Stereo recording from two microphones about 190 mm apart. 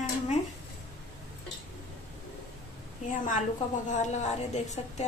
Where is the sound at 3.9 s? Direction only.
40° left (ahead or behind).